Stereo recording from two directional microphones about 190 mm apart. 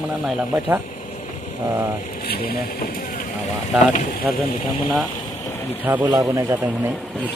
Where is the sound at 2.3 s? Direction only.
50° left (ahead or behind).